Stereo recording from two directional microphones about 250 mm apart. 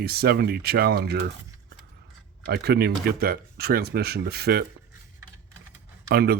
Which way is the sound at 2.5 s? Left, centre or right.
Right.